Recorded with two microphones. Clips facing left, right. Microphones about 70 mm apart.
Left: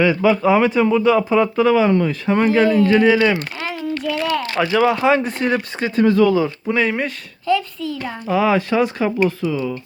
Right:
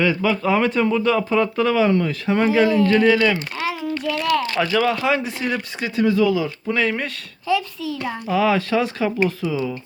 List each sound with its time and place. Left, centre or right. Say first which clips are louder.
0.0 s a child's voice: left 4 dB; centre
2.9 s speech: left 2 dB; centre
3.6 s a sound: even; centre
4.0 s a child's voice: right 1 dB; centre; by 5.2 s left
5.2 s speech: left 5 dB; left
6.7 s speech: left 3 dB; centre
7.4 s a child's voice: left 2 dB; centre